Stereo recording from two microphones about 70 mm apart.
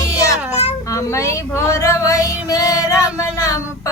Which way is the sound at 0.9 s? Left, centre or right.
Left.